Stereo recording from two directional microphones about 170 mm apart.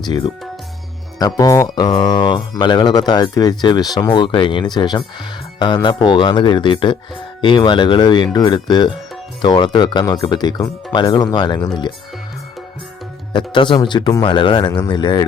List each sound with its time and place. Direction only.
0.0 s speech: 25° left (ahead or behind)
13.3 s speech: 30° left (ahead or behind)